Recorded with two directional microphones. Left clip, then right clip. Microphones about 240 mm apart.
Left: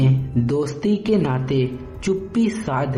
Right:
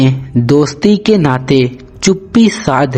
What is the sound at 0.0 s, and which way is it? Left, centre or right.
A man's voice, right.